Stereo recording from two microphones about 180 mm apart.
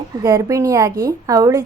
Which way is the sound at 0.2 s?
20° right (ahead or behind).